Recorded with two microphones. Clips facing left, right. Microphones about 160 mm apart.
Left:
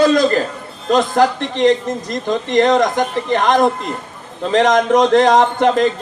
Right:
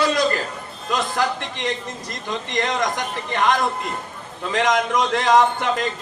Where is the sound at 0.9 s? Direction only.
50° left (ahead or behind).